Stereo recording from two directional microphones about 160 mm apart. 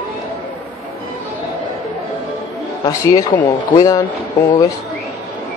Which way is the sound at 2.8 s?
25° left (ahead or behind).